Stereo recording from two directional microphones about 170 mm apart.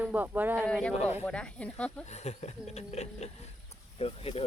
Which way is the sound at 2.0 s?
40° left (ahead or behind).